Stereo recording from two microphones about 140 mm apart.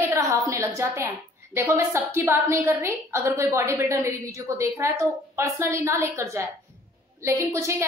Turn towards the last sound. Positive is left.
turn(degrees=-20)  # may be behind; listen again after turning